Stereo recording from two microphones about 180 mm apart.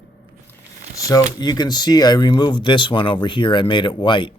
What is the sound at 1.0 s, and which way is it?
Speech, 20° left (ahead or behind).